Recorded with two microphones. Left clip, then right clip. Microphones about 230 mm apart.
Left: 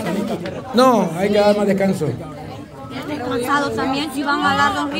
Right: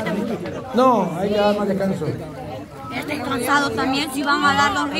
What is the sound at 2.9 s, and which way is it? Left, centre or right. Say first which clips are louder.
A woman's voice: left 1 dB; right.